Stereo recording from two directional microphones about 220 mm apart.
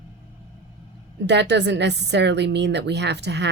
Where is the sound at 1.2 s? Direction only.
50° right (ahead or behind).